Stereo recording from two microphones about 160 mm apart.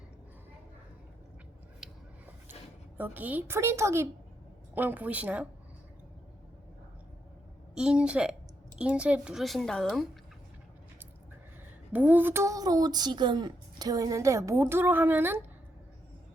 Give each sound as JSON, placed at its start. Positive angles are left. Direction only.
{"t": 1.8, "sound": "a sound", "side_deg": 0}
{"t": 3.0, "sound": "a woman's voice", "side_deg": -10}
{"t": 7.8, "sound": "speech", "side_deg": -5}
{"t": 11.9, "sound": "speech", "side_deg": -10}